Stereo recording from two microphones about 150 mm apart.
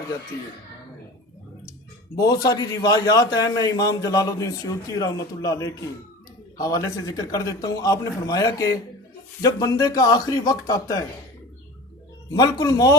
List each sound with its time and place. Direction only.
2.1 s a man's voice: 25° left (ahead or behind)
12.4 s a man's voice: 25° left (ahead or behind)